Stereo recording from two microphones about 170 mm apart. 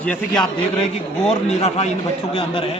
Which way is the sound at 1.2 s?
35° left (ahead or behind).